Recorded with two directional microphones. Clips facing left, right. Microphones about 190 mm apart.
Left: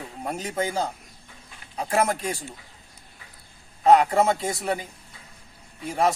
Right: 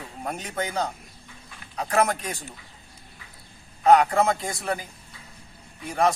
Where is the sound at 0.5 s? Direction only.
30° left (ahead or behind).